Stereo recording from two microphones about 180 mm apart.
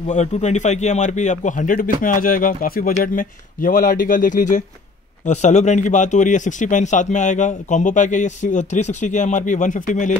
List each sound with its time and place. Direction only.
0.1 s a man's voice: 40° left (ahead or behind)